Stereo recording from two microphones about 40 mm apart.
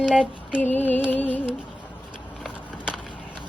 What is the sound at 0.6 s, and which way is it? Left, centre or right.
Music, left.